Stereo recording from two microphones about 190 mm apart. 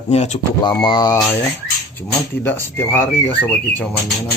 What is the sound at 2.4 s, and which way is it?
Speech, 10° left (ahead or behind).